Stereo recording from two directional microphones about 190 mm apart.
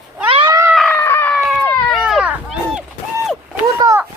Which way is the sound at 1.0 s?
10° left (ahead or behind).